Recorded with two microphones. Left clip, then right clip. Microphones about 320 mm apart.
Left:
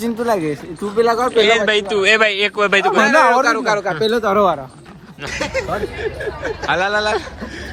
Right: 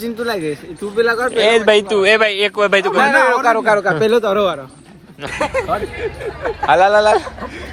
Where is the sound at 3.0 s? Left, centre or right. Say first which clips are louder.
Even; centre.